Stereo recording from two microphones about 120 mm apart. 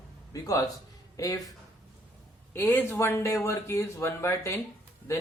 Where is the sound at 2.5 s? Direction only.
15° left (ahead or behind).